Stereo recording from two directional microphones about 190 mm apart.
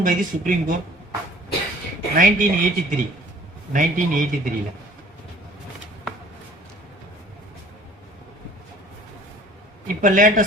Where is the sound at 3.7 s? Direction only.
45° right (ahead or behind).